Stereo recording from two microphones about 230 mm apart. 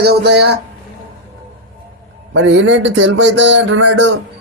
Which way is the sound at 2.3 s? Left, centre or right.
Right.